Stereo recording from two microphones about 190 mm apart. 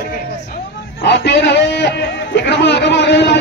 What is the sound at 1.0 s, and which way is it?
A man's voice, 65° left (ahead or behind).